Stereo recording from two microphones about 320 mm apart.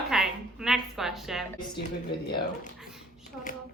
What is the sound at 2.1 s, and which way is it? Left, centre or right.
Speech, left.